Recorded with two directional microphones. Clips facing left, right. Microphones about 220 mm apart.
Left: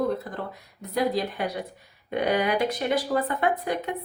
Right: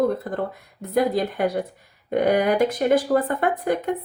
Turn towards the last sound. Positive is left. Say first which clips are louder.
# right 3 dB
turn(degrees=-50)  # may be behind; listen again after turning